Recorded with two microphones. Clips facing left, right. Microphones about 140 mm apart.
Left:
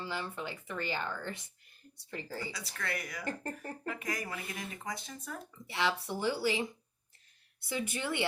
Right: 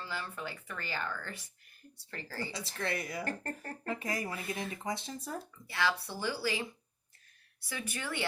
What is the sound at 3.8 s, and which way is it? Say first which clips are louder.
Speech: right 3 dB; 30° right (ahead or behind).